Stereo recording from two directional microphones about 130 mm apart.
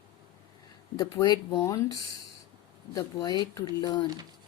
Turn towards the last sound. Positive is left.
turn(degrees=30)  # may be behind; listen again after turning